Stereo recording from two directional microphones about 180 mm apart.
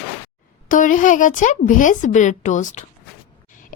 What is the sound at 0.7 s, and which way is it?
A woman's voice, 45° left (ahead or behind).